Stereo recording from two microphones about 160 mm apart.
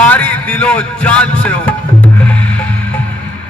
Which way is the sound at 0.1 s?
10° left (ahead or behind).